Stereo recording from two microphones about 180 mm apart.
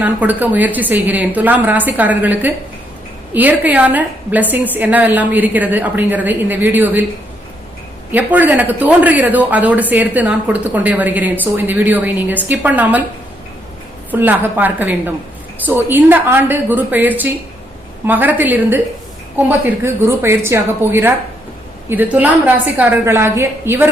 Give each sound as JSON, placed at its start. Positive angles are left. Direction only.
{"t": 0.0, "sound": "speech", "side_deg": -10}
{"t": 8.1, "sound": "speech", "side_deg": -10}
{"t": 14.1, "sound": "speech", "side_deg": -10}